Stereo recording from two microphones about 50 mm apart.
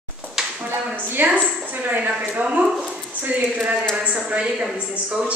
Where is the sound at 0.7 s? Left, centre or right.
Right.